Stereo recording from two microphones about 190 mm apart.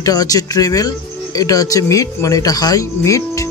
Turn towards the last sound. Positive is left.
turn(degrees=15)  # may be behind; listen again after turning